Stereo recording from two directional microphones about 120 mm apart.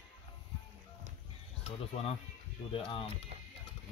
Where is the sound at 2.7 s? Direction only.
50° left (ahead or behind).